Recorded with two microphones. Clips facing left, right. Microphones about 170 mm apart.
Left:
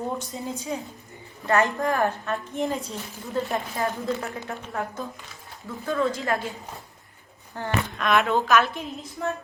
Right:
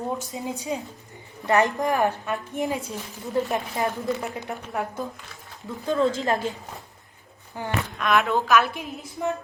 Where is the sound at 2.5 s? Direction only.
Centre (ahead or behind).